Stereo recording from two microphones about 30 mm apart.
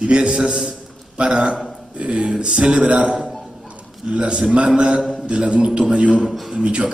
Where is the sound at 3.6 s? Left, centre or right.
Right.